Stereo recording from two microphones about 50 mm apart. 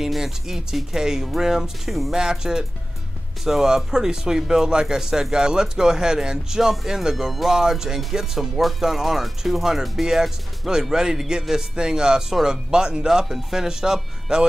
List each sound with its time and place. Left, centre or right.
0.0 s speech: centre
2.1 s speech: centre